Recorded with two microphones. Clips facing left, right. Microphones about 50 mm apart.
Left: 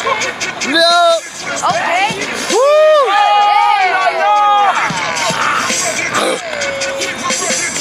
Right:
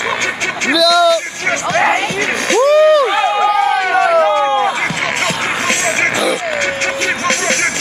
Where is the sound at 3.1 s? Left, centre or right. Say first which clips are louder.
Left 4 dB; left.